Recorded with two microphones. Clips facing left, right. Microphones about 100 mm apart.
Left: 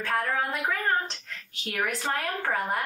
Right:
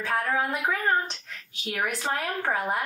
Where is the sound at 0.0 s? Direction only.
5° right (ahead or behind).